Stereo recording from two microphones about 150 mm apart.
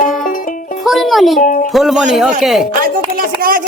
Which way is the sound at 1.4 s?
55° left (ahead or behind).